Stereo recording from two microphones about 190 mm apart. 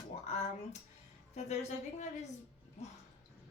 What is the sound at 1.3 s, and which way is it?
Speech, 40° left (ahead or behind).